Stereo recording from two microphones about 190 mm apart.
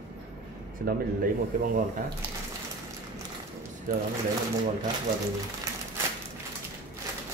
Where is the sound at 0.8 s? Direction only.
50° right (ahead or behind).